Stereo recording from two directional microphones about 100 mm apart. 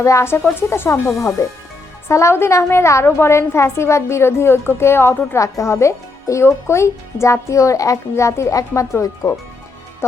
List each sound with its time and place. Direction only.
0.0 s a woman's voice: 30° left (ahead or behind)
2.0 s a woman's voice: 25° left (ahead or behind)